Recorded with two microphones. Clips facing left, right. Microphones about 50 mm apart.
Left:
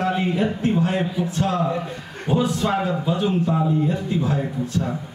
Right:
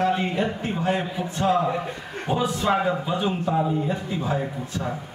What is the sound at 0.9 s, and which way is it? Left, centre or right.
Speech, centre.